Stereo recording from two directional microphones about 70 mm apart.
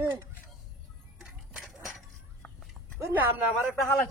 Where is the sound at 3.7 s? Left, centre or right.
Centre.